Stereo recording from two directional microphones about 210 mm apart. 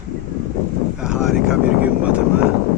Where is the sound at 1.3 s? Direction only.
5° right (ahead or behind).